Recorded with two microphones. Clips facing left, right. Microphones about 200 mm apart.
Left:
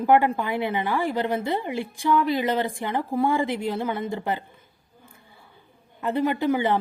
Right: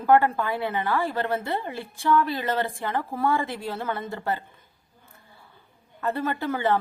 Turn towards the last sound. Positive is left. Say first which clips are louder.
# left 2 dB
turn(degrees=15)  # may be behind; listen again after turning